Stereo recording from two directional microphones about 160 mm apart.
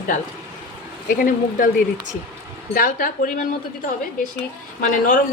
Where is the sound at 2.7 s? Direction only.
60° left (ahead or behind).